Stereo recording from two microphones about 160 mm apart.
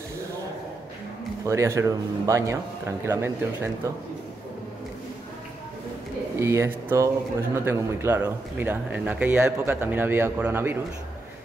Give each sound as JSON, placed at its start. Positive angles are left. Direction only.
{"t": 1.4, "sound": "speech", "side_deg": -20}
{"t": 6.3, "sound": "speech", "side_deg": -15}